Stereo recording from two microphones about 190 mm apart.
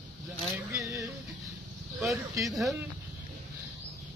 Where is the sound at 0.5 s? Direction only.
15° right (ahead or behind).